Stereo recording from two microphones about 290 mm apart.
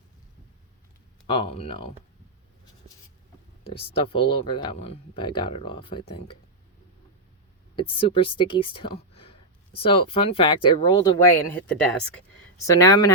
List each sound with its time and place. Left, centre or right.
1.3 s speech: centre
3.7 s speech: centre
7.8 s speech: centre